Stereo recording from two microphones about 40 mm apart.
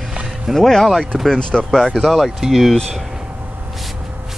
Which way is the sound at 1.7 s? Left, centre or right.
Centre.